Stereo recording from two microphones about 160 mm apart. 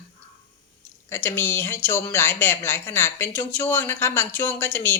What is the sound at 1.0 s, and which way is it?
Speech, 15° left (ahead or behind).